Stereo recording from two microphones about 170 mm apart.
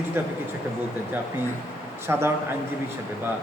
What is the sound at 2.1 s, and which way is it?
Speech, 15° right (ahead or behind).